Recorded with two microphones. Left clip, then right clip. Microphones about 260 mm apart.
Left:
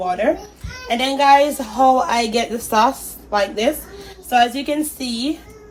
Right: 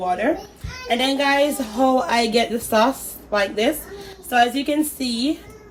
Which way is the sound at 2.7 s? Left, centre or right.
Centre.